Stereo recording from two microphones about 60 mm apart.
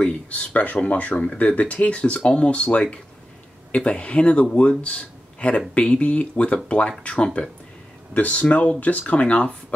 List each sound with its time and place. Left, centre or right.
0.0 s speech: left